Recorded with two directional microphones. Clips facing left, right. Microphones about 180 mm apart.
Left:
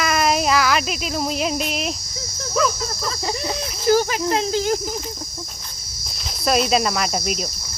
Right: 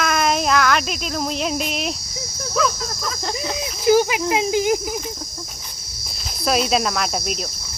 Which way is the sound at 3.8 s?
15° right (ahead or behind).